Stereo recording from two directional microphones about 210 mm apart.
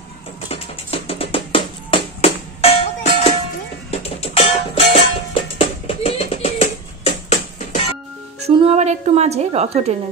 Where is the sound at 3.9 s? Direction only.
30° left (ahead or behind).